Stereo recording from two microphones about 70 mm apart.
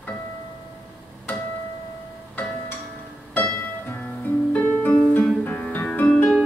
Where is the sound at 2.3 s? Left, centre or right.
Left.